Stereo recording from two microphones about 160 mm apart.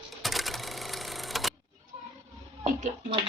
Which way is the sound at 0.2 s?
Centre (ahead or behind).